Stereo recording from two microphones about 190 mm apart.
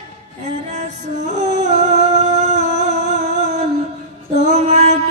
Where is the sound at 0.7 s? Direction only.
40° right (ahead or behind).